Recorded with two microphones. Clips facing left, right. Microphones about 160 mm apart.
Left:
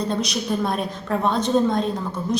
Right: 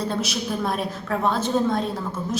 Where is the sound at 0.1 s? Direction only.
5° right (ahead or behind).